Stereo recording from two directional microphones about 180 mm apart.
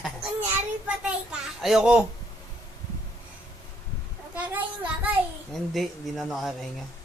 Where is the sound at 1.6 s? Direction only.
5° right (ahead or behind).